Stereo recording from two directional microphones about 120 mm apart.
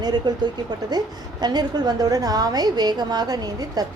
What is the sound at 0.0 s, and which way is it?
A woman's voice, 35° right (ahead or behind).